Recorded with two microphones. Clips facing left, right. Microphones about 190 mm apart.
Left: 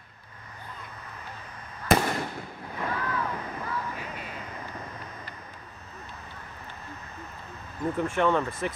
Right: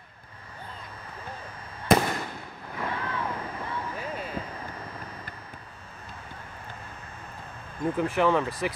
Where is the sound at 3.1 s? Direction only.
25° right (ahead or behind).